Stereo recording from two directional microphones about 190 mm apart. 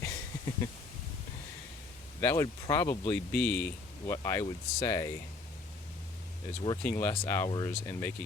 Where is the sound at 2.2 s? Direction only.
15° left (ahead or behind).